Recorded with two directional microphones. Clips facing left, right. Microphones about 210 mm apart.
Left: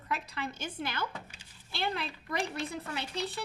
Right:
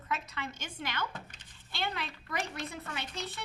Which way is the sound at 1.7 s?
35° left (ahead or behind).